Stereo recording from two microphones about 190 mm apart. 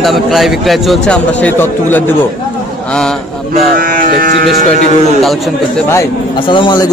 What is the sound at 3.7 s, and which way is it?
Speech, 45° right (ahead or behind).